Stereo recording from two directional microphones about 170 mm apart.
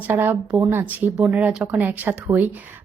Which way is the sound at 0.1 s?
10° right (ahead or behind).